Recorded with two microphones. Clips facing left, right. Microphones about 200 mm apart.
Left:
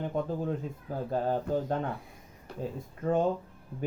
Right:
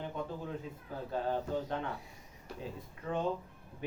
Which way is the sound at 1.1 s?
45° left (ahead or behind).